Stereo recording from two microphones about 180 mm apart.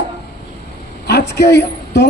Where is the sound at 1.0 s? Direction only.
65° left (ahead or behind).